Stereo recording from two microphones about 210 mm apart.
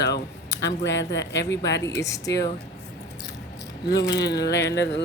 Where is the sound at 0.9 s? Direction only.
55° left (ahead or behind).